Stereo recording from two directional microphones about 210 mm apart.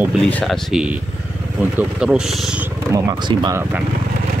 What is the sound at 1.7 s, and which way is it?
Speech, 5° right (ahead or behind).